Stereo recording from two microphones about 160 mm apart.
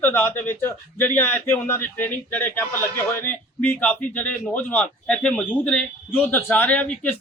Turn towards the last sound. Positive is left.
turn(degrees=10)  # may be behind; listen again after turning